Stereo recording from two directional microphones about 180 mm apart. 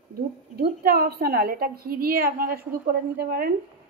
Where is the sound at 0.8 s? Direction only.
55° right (ahead or behind).